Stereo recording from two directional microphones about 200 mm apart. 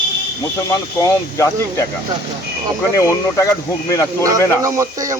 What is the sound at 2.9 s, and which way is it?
Speech, 15° left (ahead or behind).